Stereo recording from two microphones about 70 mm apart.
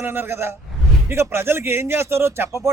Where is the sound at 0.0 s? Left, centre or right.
Right.